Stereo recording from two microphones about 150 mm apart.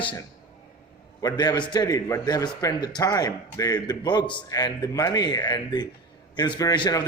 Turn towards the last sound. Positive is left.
turn(degrees=25)  # may be behind; listen again after turning